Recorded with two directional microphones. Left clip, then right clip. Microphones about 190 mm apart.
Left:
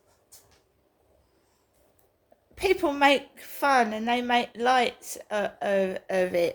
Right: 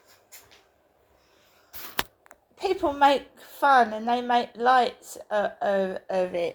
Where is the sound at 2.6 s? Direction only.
30° left (ahead or behind).